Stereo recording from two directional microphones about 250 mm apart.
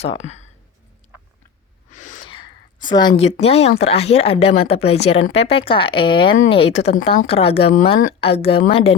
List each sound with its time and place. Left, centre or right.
0.0 s speech: left
1.9 s a sound: left
3.4 s speech: left